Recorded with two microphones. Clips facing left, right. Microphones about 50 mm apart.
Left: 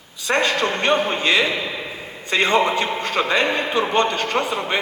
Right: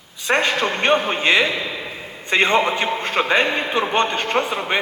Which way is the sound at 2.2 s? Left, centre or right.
Right.